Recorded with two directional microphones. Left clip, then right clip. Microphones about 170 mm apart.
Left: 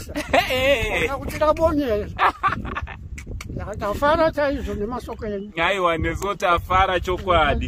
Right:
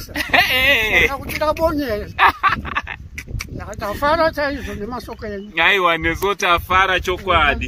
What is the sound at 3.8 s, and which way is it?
Speech, 35° left (ahead or behind).